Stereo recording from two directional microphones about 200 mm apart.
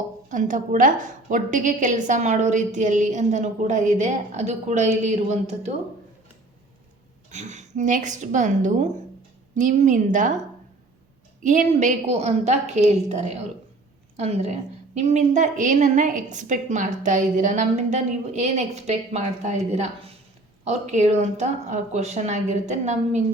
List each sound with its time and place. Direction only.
0.3 s a woman's voice: 40° right (ahead or behind)
7.3 s a woman's voice: 35° right (ahead or behind)
11.4 s a woman's voice: 40° right (ahead or behind)